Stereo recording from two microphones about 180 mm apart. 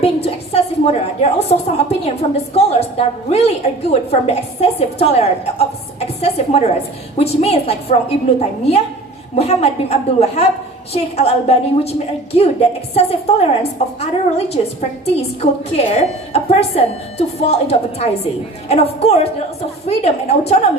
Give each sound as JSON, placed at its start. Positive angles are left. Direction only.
{"t": 0.0, "sound": "a woman's voice", "side_deg": 35}